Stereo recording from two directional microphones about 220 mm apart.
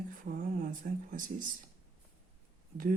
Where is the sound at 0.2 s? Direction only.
35° right (ahead or behind).